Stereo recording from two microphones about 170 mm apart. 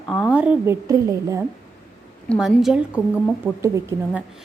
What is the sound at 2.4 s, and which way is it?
Speech, 5° right (ahead or behind).